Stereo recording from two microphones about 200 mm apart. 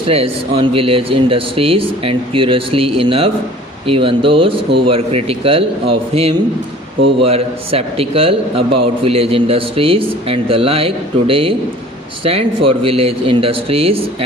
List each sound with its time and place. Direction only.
0.1 s a man's voice: 30° right (ahead or behind)